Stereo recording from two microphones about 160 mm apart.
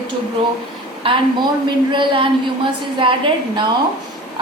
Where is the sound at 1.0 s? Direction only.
35° right (ahead or behind).